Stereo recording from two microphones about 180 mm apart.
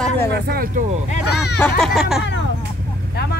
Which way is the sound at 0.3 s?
60° right (ahead or behind).